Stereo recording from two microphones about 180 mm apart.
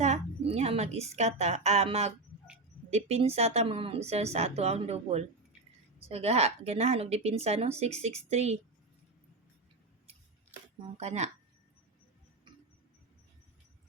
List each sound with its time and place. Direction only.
0.0 s a woman's voice: 35° right (ahead or behind)
10.9 s a woman's voice: 35° right (ahead or behind)